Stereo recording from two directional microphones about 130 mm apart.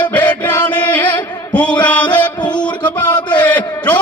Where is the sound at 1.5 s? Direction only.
10° left (ahead or behind).